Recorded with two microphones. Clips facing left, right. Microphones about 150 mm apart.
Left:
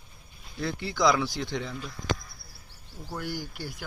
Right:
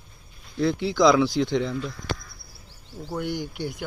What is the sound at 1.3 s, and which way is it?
Speech, 75° right (ahead or behind).